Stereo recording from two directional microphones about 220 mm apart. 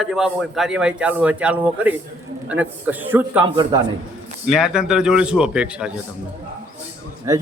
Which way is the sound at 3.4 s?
20° right (ahead or behind).